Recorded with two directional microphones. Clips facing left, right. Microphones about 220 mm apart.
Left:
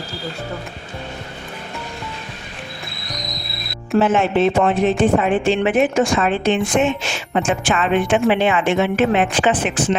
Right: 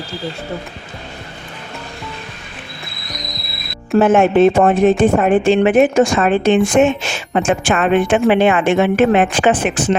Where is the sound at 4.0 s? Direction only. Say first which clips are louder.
Right 6 dB; 50° right (ahead or behind).